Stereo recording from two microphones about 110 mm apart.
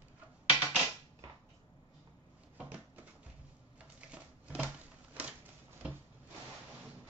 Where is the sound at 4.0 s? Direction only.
10° right (ahead or behind).